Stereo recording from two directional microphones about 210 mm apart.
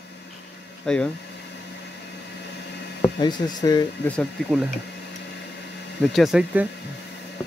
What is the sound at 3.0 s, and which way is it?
Speech, 20° left (ahead or behind).